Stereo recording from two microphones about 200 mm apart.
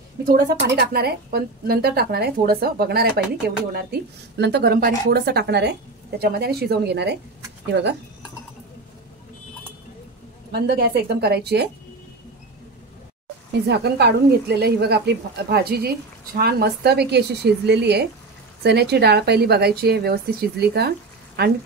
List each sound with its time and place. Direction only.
0.3 s a woman's voice: 50° right (ahead or behind)
10.5 s a woman's voice: 50° right (ahead or behind)
13.7 s a woman's voice: 55° right (ahead or behind)